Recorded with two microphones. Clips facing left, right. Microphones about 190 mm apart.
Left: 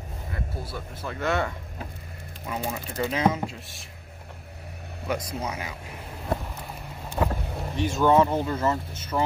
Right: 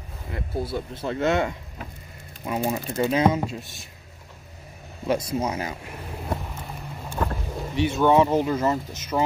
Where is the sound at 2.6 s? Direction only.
20° right (ahead or behind).